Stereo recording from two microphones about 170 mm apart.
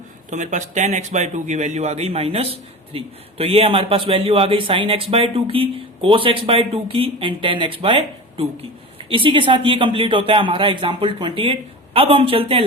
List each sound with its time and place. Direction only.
0.3 s a man's voice: 45° right (ahead or behind)